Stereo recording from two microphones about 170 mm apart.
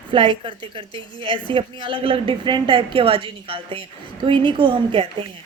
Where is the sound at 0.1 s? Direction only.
30° right (ahead or behind).